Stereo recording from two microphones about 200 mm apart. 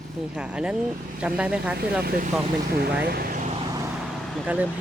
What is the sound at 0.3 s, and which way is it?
Speech, 5° right (ahead or behind).